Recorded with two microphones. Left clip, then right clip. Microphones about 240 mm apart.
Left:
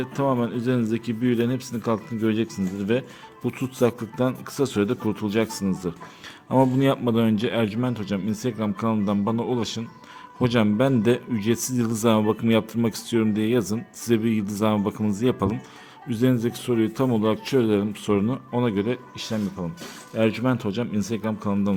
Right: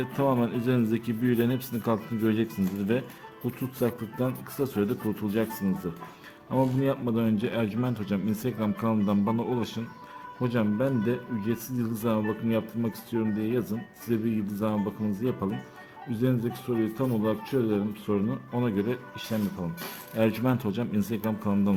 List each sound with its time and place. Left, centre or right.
0.0 s a man's voice: centre
10.4 s speech: left; by 21.8 s centre